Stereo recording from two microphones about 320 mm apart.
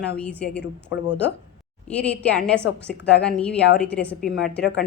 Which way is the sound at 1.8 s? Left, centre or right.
Centre.